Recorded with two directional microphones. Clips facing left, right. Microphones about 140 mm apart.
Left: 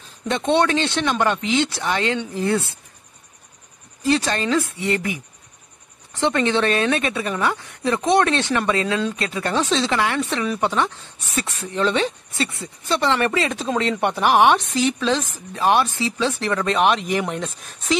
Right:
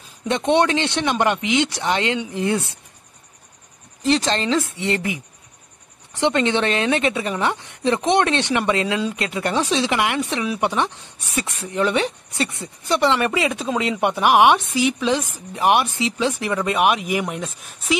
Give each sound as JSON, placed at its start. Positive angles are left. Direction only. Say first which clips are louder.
{"t": 0.3, "sound": "a woman's voice", "louder": "right 1 dB", "side_deg": -20}
{"t": 4.0, "sound": "a woman's voice", "louder": "right 1 dB", "side_deg": -20}